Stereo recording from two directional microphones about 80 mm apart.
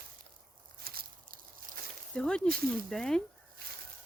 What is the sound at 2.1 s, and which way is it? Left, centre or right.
Speech, centre.